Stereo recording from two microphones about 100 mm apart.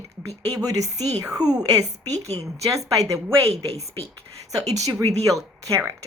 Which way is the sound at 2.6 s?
35° right (ahead or behind).